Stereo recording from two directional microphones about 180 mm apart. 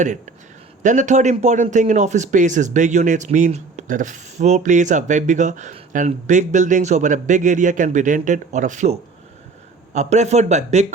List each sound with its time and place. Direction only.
0.8 s a man's voice: 45° right (ahead or behind)